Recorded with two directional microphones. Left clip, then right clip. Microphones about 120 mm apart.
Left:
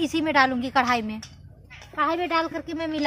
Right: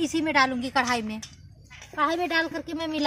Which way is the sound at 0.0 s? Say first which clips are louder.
Left 2 dB; 35° left (ahead or behind).